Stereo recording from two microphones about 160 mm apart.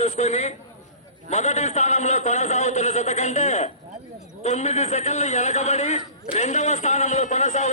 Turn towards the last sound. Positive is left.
turn(degrees=45)  # may be behind; listen again after turning